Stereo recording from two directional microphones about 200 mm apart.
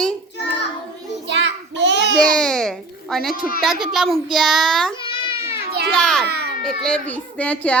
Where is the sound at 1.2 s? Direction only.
60° right (ahead or behind).